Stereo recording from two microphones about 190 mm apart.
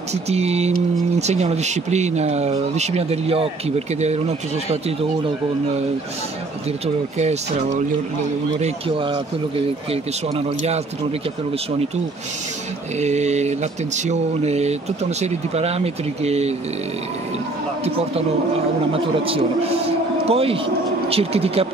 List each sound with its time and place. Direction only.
0.1 s speech: 35° right (ahead or behind)
7.2 s speech: 35° right (ahead or behind)
10.3 s speech: 35° right (ahead or behind)
13.0 s speech: 35° right (ahead or behind)
20.2 s speech: 30° right (ahead or behind)